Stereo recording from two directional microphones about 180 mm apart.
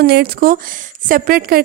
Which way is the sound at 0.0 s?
60° right (ahead or behind).